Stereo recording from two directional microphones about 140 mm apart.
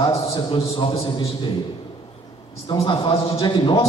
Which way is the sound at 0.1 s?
40° left (ahead or behind).